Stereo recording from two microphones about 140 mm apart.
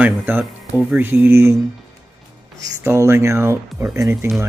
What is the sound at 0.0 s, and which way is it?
Speech, 10° right (ahead or behind).